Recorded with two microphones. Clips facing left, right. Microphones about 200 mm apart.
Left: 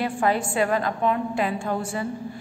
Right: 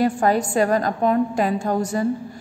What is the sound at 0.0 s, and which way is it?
A woman's voice, 40° right (ahead or behind).